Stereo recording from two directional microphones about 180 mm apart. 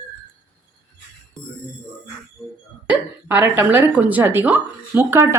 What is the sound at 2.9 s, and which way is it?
Speech, 10° right (ahead or behind).